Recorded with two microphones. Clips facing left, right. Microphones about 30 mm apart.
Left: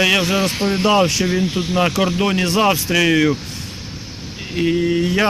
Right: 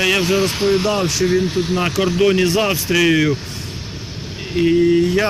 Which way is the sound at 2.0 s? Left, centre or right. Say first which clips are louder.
Right 3 dB; centre.